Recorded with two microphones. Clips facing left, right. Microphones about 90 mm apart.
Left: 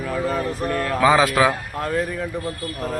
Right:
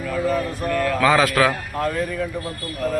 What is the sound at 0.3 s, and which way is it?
Mantra, 30° left (ahead or behind).